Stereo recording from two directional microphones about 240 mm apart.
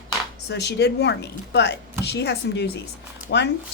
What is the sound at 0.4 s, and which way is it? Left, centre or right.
Speech, left.